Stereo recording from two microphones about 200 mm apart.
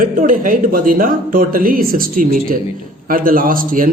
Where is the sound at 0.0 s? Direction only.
40° right (ahead or behind).